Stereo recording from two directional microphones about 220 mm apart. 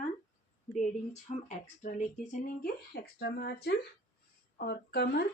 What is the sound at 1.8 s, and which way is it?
Speech, 35° left (ahead or behind).